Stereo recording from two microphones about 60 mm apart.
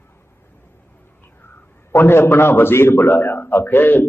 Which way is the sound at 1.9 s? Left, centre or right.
Left.